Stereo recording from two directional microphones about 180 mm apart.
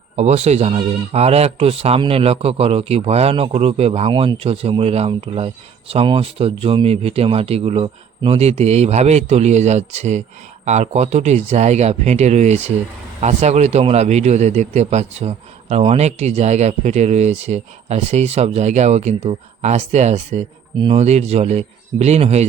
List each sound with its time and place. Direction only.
0.2 s a man's voice: 35° right (ahead or behind)